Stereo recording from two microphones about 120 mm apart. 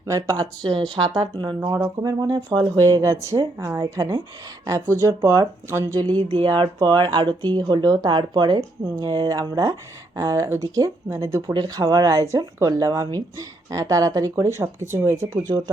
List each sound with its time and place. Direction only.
0.1 s speech: 35° right (ahead or behind)
1.8 s speech: 30° right (ahead or behind)